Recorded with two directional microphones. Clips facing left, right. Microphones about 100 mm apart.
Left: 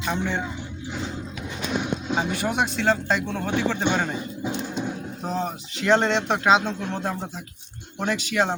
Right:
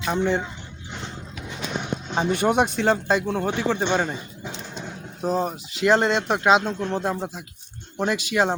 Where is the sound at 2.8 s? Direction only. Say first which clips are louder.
Right 2 dB; 15° right (ahead or behind).